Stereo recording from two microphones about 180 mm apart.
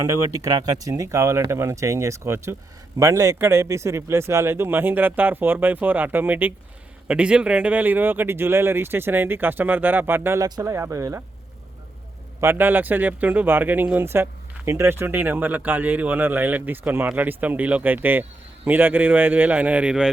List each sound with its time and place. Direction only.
0.3 s speech: 20° right (ahead or behind)
12.4 s speech: 10° right (ahead or behind)